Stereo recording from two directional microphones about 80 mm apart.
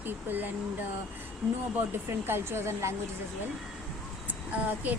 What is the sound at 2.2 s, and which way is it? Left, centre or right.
Speech, right.